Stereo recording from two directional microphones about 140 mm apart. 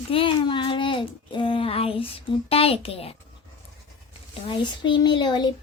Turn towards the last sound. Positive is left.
turn(degrees=30)  # may be behind; listen again after turning